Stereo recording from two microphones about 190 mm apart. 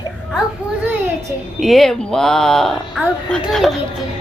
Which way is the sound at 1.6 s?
Centre (ahead or behind).